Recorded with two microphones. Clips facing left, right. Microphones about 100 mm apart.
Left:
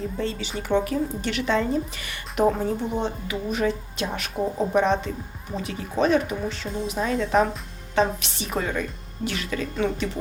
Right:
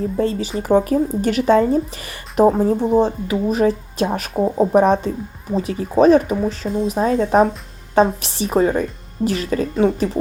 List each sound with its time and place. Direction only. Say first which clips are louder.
0.2 s a woman's voice: right 8 dB; 40° right (ahead or behind)